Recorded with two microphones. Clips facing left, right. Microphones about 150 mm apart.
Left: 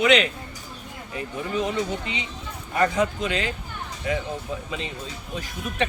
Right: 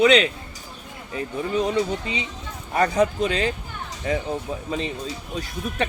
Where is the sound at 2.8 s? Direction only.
35° right (ahead or behind).